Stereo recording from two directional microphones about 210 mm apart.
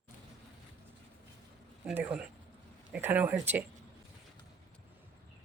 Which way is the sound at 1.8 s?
5° right (ahead or behind).